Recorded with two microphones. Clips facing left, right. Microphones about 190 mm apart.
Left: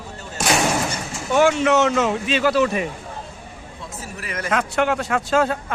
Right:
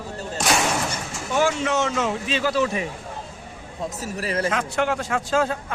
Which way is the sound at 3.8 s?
40° right (ahead or behind).